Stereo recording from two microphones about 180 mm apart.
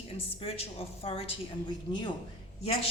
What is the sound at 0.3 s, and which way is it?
A woman's voice, 35° left (ahead or behind).